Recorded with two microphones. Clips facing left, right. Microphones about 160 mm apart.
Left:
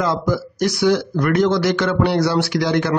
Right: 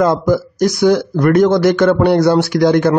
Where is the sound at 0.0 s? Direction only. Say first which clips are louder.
Right 7 dB; 50° right (ahead or behind).